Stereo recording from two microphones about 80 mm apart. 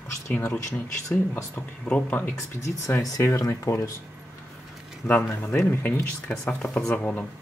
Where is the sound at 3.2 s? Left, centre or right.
Left.